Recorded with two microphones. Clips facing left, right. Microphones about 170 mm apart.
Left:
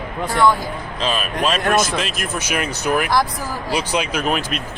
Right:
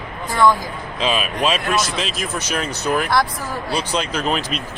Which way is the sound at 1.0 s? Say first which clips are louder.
Right 1 dB; 5° right (ahead or behind).